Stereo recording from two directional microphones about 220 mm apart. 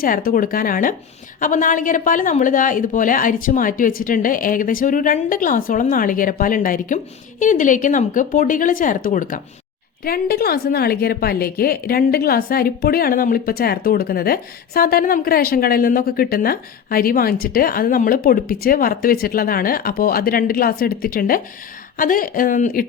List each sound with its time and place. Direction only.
0.0 s a woman's voice: 40° left (ahead or behind)